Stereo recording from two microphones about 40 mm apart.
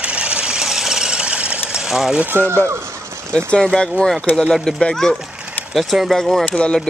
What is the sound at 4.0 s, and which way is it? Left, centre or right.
Speech, centre.